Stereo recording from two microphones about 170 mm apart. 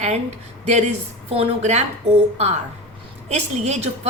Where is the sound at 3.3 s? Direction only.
40° right (ahead or behind).